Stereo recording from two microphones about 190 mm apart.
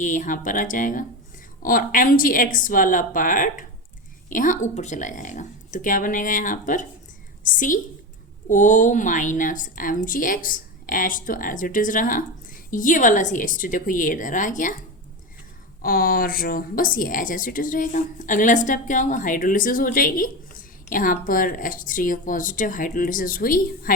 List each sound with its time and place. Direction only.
0.0 s a woman's voice: 40° left (ahead or behind)
15.8 s speech: 50° left (ahead or behind)